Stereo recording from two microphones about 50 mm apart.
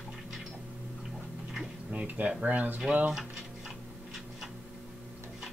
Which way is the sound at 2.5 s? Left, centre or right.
Right.